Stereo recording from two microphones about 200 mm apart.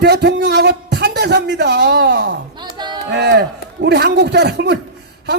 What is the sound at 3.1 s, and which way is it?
A man's voice, 55° right (ahead or behind).